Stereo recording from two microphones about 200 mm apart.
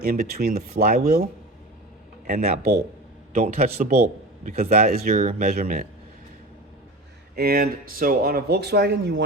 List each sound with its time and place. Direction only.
0.0 s a man's voice: 50° right (ahead or behind)
7.3 s speech: 50° right (ahead or behind)